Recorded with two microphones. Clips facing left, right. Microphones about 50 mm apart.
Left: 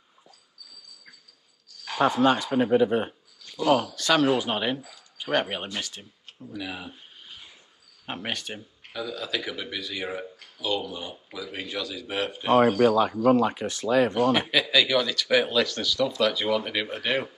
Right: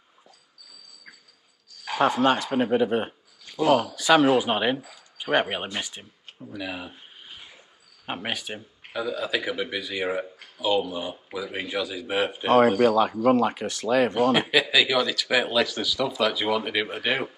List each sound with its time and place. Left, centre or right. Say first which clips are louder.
2.5 s speech: left 1 dB; right
3.4 s a man's voice: right 2 dB; centre
12.8 s speech: even; right
14.1 s a man's voice: right 2 dB; centre